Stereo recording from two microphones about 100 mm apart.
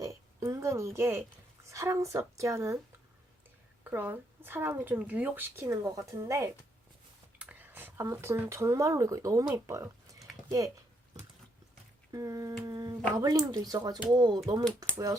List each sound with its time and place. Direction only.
0.0 s a sound: 35° right (ahead or behind)
1.6 s speech: 30° right (ahead or behind)
3.8 s speech: 20° right (ahead or behind)
7.3 s speech: 15° right (ahead or behind); by 10.7 s 35° right (ahead or behind)
12.1 s speech: 35° right (ahead or behind)